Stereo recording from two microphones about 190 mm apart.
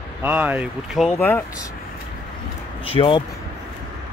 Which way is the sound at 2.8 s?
30° left (ahead or behind).